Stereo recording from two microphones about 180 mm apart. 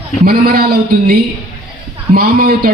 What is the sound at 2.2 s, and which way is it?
Speech, 55° right (ahead or behind).